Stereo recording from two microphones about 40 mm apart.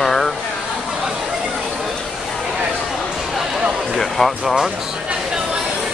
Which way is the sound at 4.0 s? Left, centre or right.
Centre.